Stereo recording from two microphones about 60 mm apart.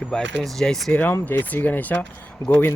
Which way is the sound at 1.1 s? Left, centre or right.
Left.